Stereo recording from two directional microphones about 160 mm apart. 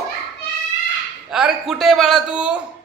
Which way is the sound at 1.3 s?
Centre (ahead or behind).